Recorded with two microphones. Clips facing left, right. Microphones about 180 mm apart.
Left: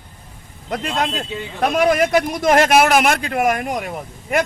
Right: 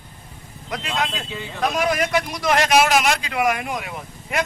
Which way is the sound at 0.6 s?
50° left (ahead or behind).